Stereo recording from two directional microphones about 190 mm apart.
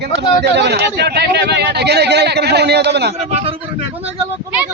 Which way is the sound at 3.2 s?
30° right (ahead or behind).